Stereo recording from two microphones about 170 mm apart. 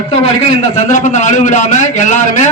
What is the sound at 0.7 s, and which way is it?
A man's voice, 45° left (ahead or behind).